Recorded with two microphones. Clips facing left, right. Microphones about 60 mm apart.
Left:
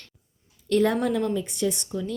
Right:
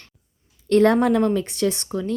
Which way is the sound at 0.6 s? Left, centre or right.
Right.